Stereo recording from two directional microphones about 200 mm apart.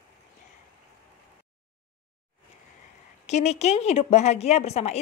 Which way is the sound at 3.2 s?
35° left (ahead or behind).